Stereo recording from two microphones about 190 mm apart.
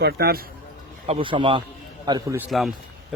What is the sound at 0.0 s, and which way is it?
Speech, 55° right (ahead or behind).